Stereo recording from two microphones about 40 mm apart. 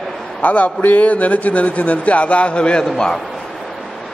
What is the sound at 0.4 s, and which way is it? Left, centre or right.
A man's voice, left.